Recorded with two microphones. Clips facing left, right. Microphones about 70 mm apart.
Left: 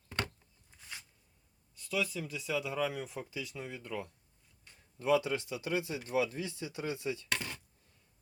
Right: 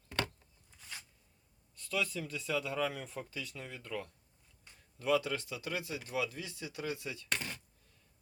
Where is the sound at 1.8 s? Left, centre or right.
Centre; by 7.2 s left.